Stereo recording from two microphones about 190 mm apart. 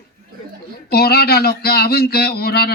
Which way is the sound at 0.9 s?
55° left (ahead or behind).